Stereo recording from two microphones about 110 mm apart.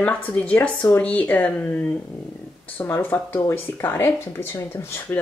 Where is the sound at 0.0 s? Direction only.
15° left (ahead or behind).